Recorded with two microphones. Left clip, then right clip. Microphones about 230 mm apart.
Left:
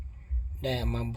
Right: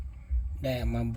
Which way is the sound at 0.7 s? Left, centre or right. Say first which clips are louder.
Even; centre.